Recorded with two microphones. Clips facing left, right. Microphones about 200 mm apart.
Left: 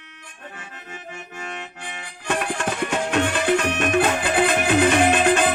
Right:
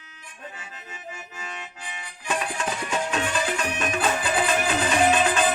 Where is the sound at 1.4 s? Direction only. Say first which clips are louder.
Left 5 dB; 60° left (ahead or behind).